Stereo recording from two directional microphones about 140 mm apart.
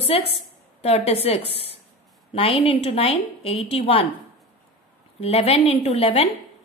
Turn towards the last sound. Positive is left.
turn(degrees=45)  # may be behind; listen again after turning